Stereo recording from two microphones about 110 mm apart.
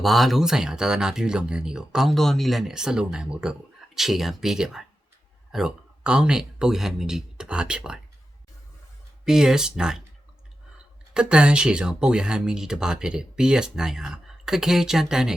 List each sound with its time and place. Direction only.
0.0 s speech: centre (ahead or behind)
9.2 s speech: 5° right (ahead or behind)
11.1 s speech: 10° right (ahead or behind)